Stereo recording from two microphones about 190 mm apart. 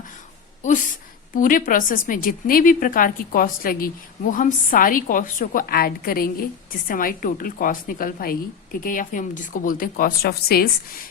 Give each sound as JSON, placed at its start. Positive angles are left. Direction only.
{"t": 0.6, "sound": "a woman's voice", "side_deg": 40}